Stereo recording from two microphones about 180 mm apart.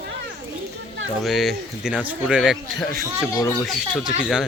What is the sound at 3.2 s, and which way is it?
Speech, 15° left (ahead or behind).